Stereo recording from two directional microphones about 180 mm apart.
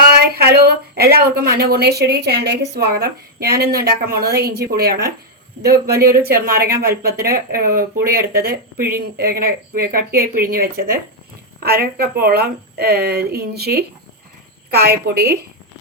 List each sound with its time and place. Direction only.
0.2 s a woman's voice: 60° right (ahead or behind)